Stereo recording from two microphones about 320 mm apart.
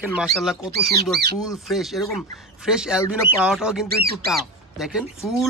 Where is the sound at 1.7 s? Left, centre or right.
Centre.